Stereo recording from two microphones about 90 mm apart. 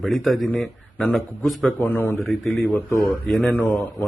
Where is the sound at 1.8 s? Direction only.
25° left (ahead or behind).